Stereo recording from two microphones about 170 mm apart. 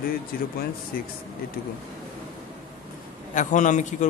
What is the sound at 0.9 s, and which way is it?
Speech, 60° left (ahead or behind).